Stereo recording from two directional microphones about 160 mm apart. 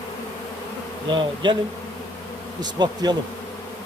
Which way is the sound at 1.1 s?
30° right (ahead or behind).